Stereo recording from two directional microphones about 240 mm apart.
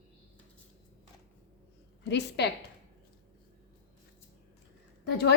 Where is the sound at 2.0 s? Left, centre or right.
Left.